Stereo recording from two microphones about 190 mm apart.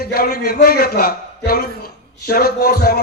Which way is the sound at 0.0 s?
55° left (ahead or behind).